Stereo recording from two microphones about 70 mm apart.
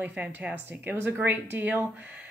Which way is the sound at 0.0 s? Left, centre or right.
Right.